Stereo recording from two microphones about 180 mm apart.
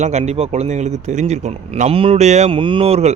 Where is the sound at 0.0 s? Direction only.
40° right (ahead or behind).